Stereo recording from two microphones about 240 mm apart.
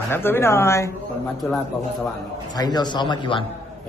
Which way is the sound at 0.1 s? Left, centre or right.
Centre.